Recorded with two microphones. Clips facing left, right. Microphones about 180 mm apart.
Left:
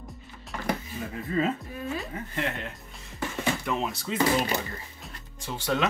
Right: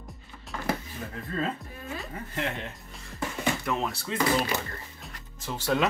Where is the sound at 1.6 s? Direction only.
Centre (ahead or behind).